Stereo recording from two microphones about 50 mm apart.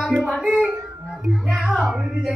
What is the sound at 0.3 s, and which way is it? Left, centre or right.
Speech, centre.